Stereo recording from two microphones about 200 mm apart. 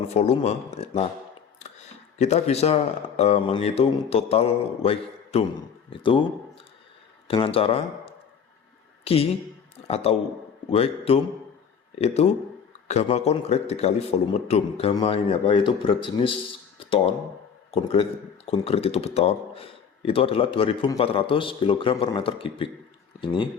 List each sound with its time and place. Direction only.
0.1 s a man's voice: 30° left (ahead or behind)
2.1 s a man's voice: 35° left (ahead or behind)
7.3 s a man's voice: 25° left (ahead or behind)
18.4 s a man's voice: 30° left (ahead or behind)